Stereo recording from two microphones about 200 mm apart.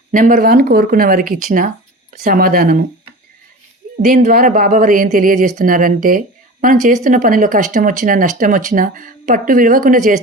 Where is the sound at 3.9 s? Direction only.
50° right (ahead or behind).